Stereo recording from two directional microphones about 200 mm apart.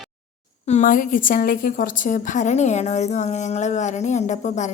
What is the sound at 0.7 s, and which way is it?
A woman's voice, 40° left (ahead or behind).